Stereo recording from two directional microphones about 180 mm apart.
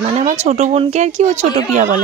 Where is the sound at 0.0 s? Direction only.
40° right (ahead or behind).